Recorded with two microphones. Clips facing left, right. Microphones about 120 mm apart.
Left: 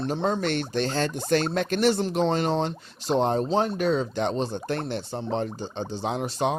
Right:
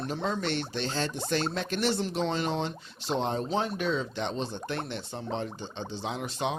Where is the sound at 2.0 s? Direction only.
40° left (ahead or behind).